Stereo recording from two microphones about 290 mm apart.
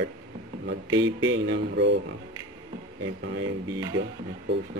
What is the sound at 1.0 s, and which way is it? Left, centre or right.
A man's voice, right.